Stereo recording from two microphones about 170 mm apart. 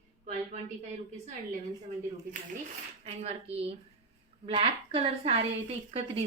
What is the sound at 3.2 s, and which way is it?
A woman's voice, 35° right (ahead or behind).